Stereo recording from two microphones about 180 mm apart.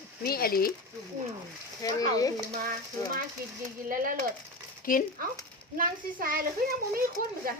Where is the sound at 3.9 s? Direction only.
50° right (ahead or behind).